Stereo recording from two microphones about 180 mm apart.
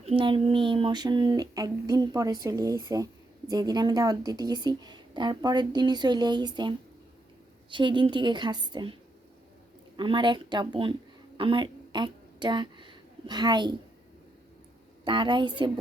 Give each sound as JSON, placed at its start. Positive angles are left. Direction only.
{"t": 0.0, "sound": "a woman's voice", "side_deg": -30}
{"t": 10.0, "sound": "a woman's voice", "side_deg": -25}
{"t": 11.3, "sound": "a sound", "side_deg": -30}
{"t": 15.0, "sound": "a woman's voice", "side_deg": -25}